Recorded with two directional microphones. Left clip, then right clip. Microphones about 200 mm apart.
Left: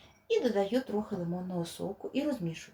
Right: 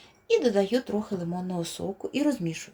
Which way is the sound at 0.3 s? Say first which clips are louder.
Right 6 dB; 60° right (ahead or behind).